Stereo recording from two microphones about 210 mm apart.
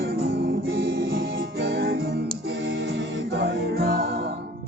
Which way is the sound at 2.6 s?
60° right (ahead or behind).